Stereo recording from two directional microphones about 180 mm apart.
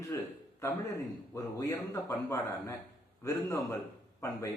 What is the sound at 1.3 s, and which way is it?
Speech, 20° left (ahead or behind).